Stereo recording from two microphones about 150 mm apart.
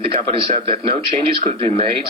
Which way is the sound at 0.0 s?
40° right (ahead or behind).